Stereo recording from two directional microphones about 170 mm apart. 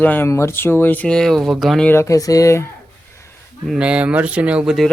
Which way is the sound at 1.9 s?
15° left (ahead or behind).